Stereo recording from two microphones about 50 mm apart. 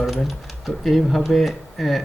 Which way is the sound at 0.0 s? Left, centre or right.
Centre.